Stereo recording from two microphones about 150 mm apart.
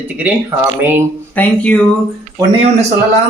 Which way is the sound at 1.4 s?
10° left (ahead or behind).